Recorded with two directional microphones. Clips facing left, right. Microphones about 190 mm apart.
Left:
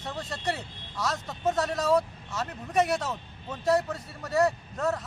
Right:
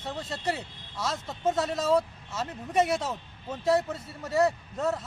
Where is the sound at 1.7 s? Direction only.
25° right (ahead or behind).